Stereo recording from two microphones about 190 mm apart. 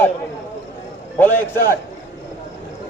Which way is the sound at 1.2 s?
10° left (ahead or behind).